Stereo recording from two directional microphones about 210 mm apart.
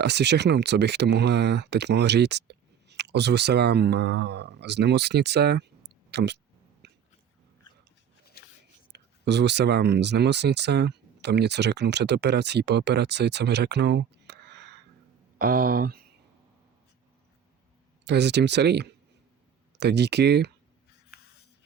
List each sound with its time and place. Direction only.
0.0 s speech: 55° right (ahead or behind)
6.8 s chewing: 55° right (ahead or behind)
8.2 s shuffling cards: 45° left (ahead or behind)
8.9 s speech: 55° right (ahead or behind)
15.4 s speech: 45° right (ahead or behind)
18.0 s speech: 55° right (ahead or behind)